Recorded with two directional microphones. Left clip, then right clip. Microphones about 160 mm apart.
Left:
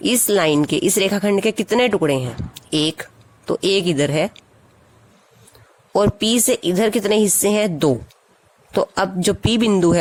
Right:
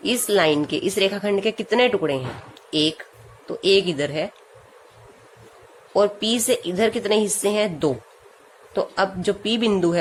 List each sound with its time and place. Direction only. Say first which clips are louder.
0.0 s speech: left 2 dB; 50° left (ahead or behind)
5.9 s a woman's voice: left 2 dB; 60° left (ahead or behind)